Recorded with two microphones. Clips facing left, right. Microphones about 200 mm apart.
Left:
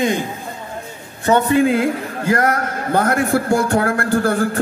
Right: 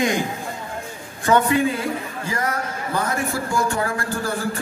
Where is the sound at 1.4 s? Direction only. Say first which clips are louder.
Left 5 dB; 65° left (ahead or behind).